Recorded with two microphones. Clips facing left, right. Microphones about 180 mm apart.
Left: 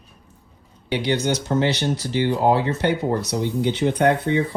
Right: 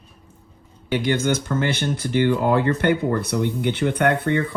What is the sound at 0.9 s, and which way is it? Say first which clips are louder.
Speech: right 1 dB; 50° right (ahead or behind).